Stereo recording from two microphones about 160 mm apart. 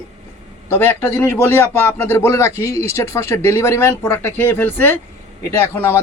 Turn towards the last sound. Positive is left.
turn(degrees=15)  # may be behind; listen again after turning